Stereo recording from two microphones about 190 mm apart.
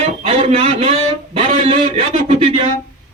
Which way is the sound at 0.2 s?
30° right (ahead or behind).